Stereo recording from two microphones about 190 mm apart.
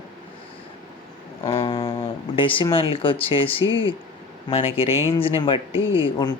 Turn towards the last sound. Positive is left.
turn(degrees=25)  # may be behind; listen again after turning